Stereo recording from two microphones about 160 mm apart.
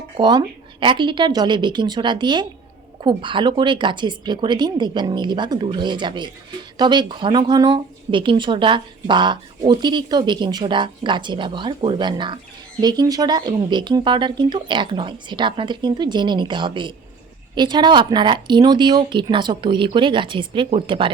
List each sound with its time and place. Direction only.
0.2 s speech: 30° right (ahead or behind)